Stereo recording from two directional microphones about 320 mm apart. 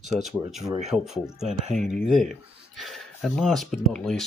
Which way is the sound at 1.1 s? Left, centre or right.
Centre.